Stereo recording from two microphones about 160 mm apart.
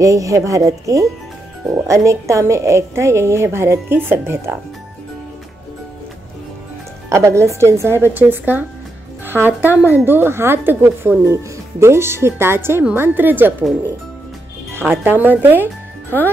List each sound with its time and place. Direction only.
0.0 s a woman's voice: 20° right (ahead or behind)
7.1 s a woman's voice: 20° right (ahead or behind)
14.8 s a woman's voice: 15° right (ahead or behind)